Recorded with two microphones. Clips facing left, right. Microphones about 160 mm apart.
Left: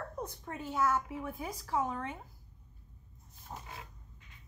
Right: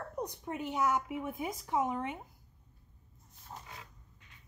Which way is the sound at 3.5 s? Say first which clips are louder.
Left 2 dB; 20° left (ahead or behind).